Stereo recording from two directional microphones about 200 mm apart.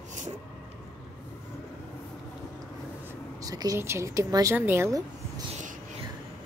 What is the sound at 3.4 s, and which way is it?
Speech, 15° right (ahead or behind).